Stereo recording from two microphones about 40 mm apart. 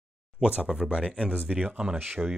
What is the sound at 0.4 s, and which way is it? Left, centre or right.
Speech, right.